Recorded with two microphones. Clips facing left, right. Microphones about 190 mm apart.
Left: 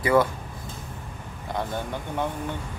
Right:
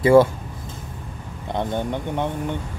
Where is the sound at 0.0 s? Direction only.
25° right (ahead or behind).